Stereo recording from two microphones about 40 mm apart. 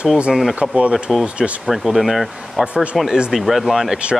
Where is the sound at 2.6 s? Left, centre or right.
Right.